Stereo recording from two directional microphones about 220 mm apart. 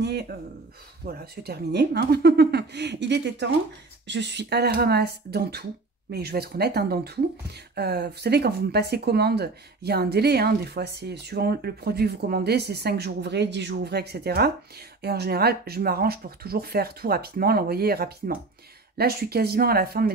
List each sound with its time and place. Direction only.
0.0 s speech: 50° right (ahead or behind)